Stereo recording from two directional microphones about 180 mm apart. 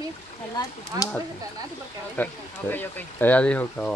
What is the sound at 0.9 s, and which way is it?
Speech, 20° right (ahead or behind).